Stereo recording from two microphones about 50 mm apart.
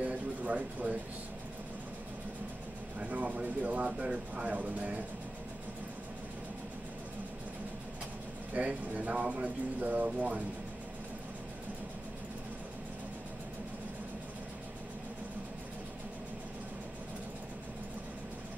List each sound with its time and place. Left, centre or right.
0.0 s a sound: right
3.0 s speech: right
8.5 s speech: right